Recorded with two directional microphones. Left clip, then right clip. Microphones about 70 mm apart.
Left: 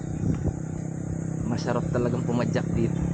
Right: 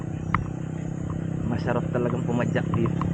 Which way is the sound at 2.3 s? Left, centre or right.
Left.